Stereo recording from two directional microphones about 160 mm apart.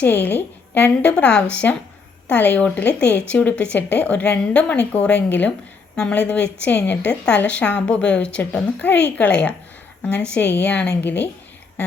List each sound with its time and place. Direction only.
0.0 s a woman's voice: 10° left (ahead or behind)